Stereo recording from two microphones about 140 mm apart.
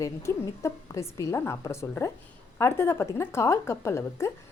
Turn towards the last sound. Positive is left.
turn(degrees=20)  # may be behind; listen again after turning